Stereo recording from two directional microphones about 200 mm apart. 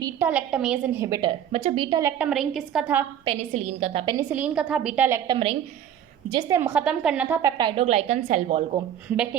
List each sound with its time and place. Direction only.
0.0 s a woman's voice: 10° right (ahead or behind)
3.2 s a woman's voice: 30° right (ahead or behind); by 7.3 s 5° right (ahead or behind)
7.4 s a woman's voice: 25° right (ahead or behind)
9.0 s a woman's voice: 5° right (ahead or behind)